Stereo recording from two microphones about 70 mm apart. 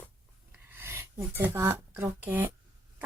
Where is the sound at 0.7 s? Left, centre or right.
Right.